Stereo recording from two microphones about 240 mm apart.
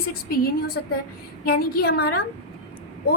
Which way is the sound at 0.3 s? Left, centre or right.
Left.